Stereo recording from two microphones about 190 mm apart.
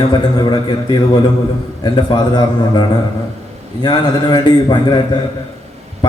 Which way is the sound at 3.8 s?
20° left (ahead or behind).